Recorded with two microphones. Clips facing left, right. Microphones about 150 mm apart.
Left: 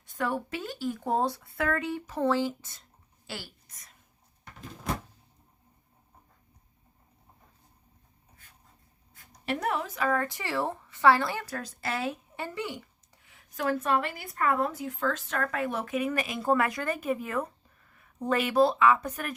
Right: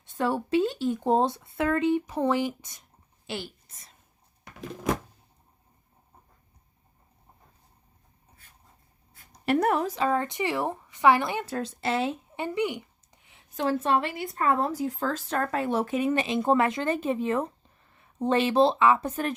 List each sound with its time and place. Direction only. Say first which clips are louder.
0.0 s speech: right 4 dB; 30° right (ahead or behind)
9.5 s a woman's voice: right 7 dB; 50° right (ahead or behind)
9.9 s speech: right 2 dB; 25° right (ahead or behind)